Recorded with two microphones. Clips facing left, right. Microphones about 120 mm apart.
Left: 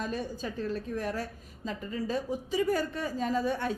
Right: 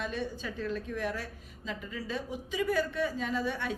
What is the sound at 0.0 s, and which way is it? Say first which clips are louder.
A woman's voice: left 1 dB; 40° left (ahead or behind).